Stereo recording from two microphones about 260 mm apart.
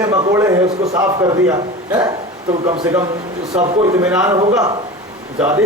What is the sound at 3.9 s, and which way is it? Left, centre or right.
Speech, centre.